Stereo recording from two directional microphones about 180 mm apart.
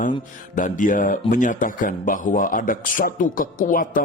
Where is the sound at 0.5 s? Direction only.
45° left (ahead or behind).